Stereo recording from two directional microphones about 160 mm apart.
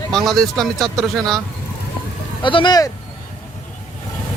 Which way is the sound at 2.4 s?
30° left (ahead or behind).